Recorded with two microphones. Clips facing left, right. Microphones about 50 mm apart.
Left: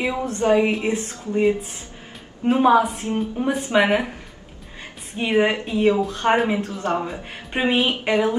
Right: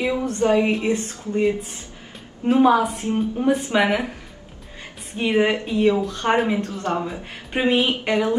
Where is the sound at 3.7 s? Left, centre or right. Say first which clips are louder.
Left 2 dB; centre.